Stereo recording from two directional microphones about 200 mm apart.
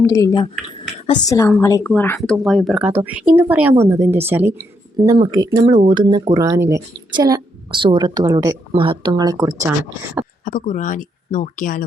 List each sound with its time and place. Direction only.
0.0 s a woman's voice: 15° left (ahead or behind); by 9.5 s 20° right (ahead or behind)
10.4 s speech: 40° left (ahead or behind)